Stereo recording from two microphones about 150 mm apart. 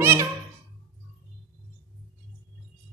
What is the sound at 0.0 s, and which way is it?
Meow, 15° right (ahead or behind).